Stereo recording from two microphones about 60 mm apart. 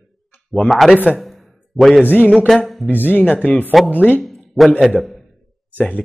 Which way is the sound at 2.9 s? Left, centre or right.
Left.